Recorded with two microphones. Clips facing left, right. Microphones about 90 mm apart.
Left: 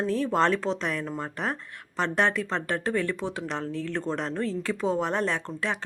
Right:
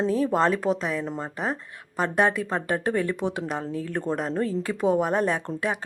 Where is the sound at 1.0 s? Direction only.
20° right (ahead or behind).